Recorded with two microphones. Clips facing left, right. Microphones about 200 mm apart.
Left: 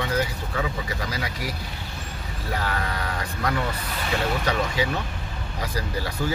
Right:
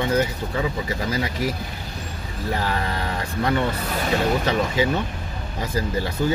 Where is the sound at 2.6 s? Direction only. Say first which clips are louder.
Right 1 dB; 30° right (ahead or behind).